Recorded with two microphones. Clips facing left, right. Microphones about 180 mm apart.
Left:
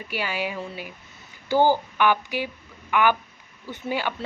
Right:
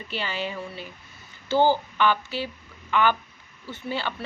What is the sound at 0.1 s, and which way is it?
A woman's voice, 10° left (ahead or behind).